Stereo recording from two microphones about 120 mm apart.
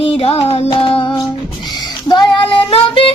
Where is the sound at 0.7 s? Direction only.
45° left (ahead or behind).